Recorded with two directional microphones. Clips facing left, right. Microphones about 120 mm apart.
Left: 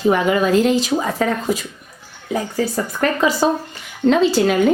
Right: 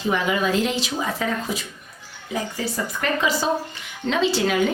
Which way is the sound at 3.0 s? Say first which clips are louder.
Left 6 dB; 45° left (ahead or behind).